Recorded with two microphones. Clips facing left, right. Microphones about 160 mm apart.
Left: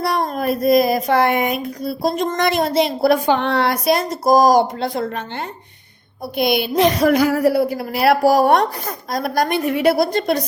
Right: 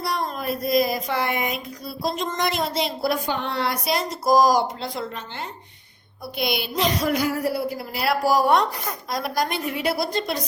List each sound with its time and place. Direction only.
0.0 s a woman's voice: 60° left (ahead or behind)
6.3 s a woman's voice: 55° left (ahead or behind)